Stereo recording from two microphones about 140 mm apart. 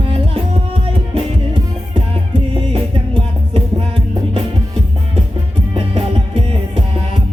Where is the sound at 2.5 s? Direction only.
40° right (ahead or behind).